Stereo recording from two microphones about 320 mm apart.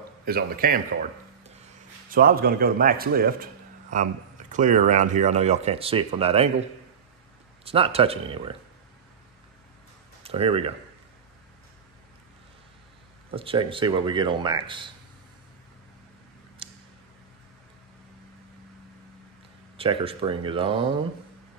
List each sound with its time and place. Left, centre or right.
0.2 s speech: right
2.0 s speech: right
7.6 s speech: centre
10.2 s speech: centre
13.3 s speech: centre
16.6 s tick-tock: centre
19.8 s speech: centre